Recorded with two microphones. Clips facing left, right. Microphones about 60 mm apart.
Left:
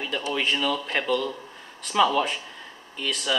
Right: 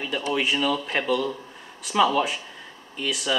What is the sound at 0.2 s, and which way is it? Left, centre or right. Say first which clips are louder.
Speech: right 2 dB; centre.